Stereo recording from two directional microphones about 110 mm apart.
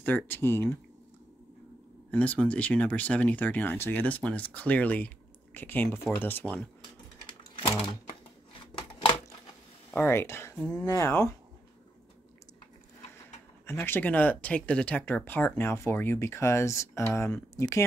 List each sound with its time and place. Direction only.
0.0 s speech: 15° left (ahead or behind)
2.0 s speech: 10° left (ahead or behind)
9.8 s a sound: 10° left (ahead or behind)
10.1 s speech: 25° left (ahead or behind)
10.6 s speech: 10° left (ahead or behind)
10.9 s speech: 25° left (ahead or behind)
13.7 s speech: 20° left (ahead or behind)